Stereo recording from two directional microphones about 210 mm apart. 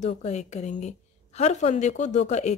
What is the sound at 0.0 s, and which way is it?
A woman's voice, 35° left (ahead or behind).